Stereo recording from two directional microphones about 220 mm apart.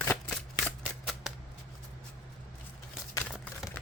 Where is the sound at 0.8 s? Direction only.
Centre (ahead or behind).